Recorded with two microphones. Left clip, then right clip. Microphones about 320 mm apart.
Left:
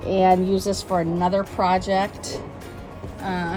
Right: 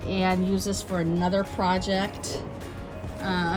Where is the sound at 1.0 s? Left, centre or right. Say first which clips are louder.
Left 3 dB; centre.